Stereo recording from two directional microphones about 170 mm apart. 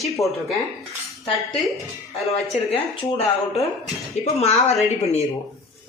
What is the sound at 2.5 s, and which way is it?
Speech, 35° left (ahead or behind).